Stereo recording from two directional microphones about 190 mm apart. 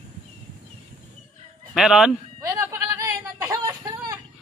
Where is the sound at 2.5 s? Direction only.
15° right (ahead or behind).